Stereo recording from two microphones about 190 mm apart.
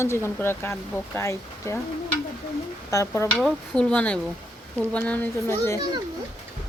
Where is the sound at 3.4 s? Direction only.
5° left (ahead or behind).